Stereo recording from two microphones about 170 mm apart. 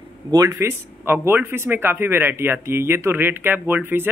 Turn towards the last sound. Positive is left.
turn(degrees=-10)  # may be behind; listen again after turning